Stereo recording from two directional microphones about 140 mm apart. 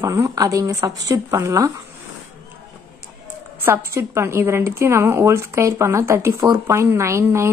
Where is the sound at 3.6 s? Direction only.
15° right (ahead or behind).